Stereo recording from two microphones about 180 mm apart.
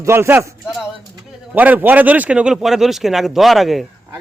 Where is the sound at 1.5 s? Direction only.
10° right (ahead or behind).